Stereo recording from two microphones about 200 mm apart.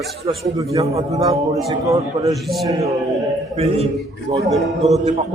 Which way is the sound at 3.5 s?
30° right (ahead or behind).